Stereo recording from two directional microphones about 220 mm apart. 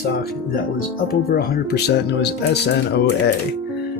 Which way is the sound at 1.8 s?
50° left (ahead or behind).